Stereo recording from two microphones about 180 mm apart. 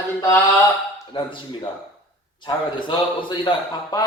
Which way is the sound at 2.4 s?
25° left (ahead or behind).